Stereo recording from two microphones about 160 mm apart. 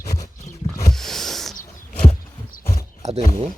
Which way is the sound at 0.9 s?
Centre (ahead or behind).